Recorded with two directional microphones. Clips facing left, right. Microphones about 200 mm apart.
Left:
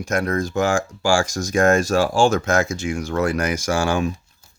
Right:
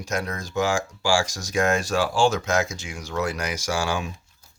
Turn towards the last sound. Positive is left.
turn(degrees=50)  # may be behind; listen again after turning